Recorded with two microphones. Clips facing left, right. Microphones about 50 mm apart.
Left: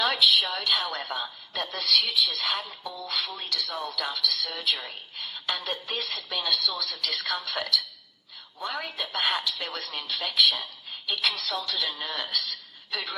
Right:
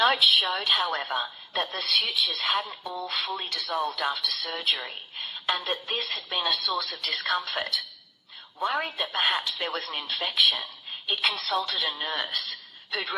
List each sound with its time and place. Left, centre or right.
0.0 s a woman's voice: right